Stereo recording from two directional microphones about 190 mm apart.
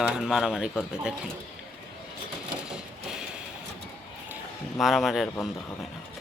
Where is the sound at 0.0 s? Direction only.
Centre (ahead or behind).